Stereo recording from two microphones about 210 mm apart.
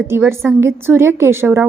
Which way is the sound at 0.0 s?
10° right (ahead or behind).